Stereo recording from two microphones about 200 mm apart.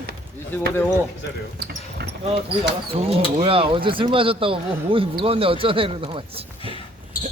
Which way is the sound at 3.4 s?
25° right (ahead or behind).